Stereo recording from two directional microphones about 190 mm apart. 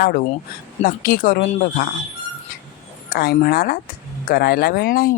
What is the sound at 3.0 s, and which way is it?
Speech, 50° left (ahead or behind).